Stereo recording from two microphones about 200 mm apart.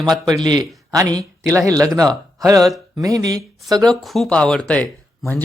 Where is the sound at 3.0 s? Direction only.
20° right (ahead or behind).